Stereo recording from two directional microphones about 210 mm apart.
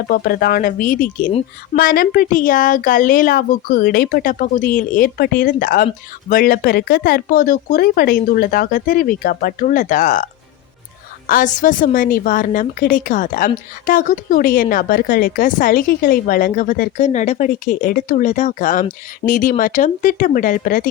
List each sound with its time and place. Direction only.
0.1 s a woman's voice: 45° left (ahead or behind)
11.3 s a woman's voice: 40° left (ahead or behind)